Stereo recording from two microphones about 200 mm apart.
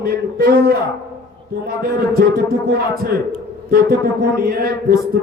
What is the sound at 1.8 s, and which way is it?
Speech, 50° right (ahead or behind).